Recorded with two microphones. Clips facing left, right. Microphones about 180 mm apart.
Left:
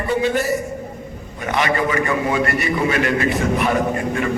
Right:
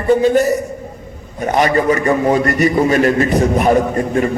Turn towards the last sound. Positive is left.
turn(degrees=-40)  # may be behind; listen again after turning